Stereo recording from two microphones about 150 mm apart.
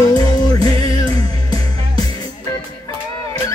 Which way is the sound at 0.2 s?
25° left (ahead or behind).